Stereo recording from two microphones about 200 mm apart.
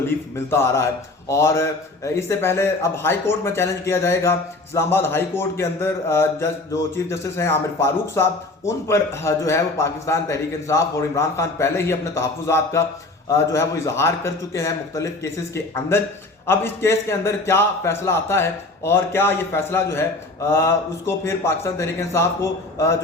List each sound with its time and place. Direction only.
0.1 s speech: 10° left (ahead or behind)